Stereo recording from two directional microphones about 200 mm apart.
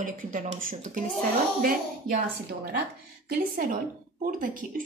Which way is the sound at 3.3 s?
40° right (ahead or behind).